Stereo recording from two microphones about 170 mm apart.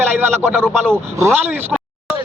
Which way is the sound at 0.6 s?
5° left (ahead or behind).